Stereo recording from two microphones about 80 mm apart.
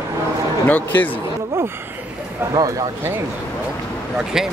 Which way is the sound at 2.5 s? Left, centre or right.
Right.